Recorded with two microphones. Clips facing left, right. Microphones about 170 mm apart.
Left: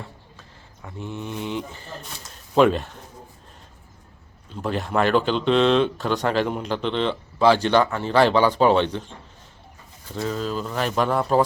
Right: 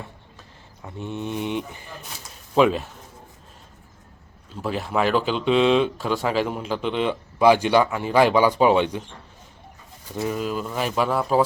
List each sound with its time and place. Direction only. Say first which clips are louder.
0.8 s speech: right 2 dB; 20° right (ahead or behind)
2.6 s speech: left 1 dB; centre (ahead or behind)
4.5 s speech: left 1 dB; centre (ahead or behind)
10.2 s speech: right 1 dB; 10° right (ahead or behind)